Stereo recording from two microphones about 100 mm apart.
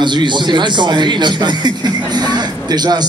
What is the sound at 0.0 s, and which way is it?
A man's voice, 50° right (ahead or behind).